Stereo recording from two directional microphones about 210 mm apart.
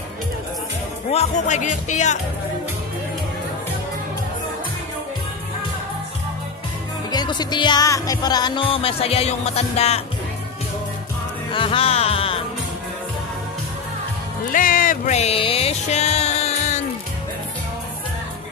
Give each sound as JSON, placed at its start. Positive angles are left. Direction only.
{"t": 1.1, "sound": "speech", "side_deg": 35}
{"t": 7.1, "sound": "music", "side_deg": 20}
{"t": 11.5, "sound": "music", "side_deg": 25}
{"t": 14.5, "sound": "music", "side_deg": 40}